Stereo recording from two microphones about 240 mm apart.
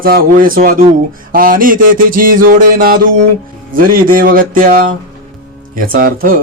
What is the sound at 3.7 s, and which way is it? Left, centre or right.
Speech, right.